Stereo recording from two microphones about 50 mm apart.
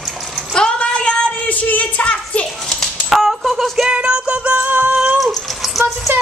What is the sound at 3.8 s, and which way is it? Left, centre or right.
Music, centre.